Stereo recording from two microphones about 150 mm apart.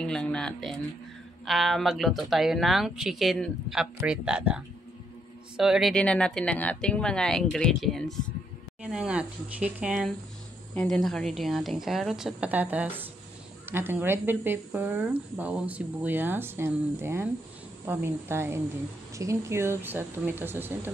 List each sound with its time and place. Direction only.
0.0 s speech: 5° left (ahead or behind); by 20.9 s 15° right (ahead or behind)